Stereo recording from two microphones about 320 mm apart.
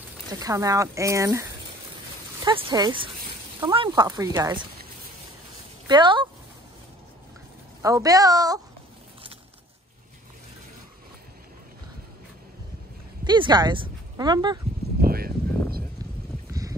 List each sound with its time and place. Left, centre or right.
0.3 s speech: centre
5.9 s speech: centre
7.8 s speech: centre
13.2 s speech: centre
15.0 s a sound: right